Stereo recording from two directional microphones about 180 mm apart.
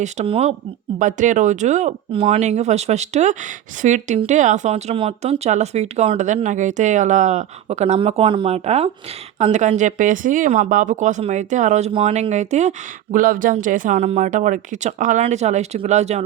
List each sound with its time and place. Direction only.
0.0 s speech: 35° right (ahead or behind)